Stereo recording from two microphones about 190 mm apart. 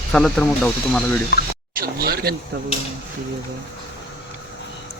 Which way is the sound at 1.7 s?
55° right (ahead or behind).